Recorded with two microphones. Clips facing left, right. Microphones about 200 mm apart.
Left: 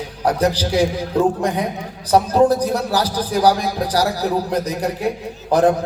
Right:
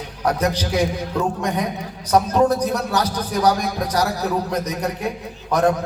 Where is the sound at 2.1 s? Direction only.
30° left (ahead or behind).